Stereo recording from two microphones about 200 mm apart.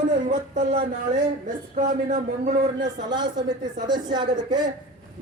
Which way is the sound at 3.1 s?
20° right (ahead or behind).